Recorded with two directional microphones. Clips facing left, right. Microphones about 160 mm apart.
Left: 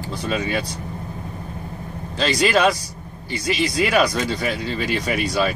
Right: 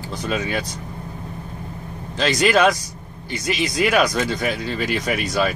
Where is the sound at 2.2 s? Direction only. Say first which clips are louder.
Right 1 dB; 5° left (ahead or behind).